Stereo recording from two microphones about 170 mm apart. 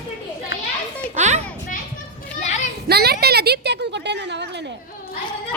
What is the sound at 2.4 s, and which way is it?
Children playing, 45° left (ahead or behind).